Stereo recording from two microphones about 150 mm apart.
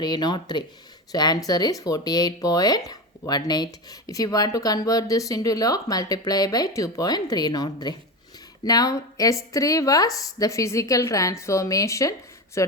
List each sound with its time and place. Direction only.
0.0 s speech: 30° left (ahead or behind)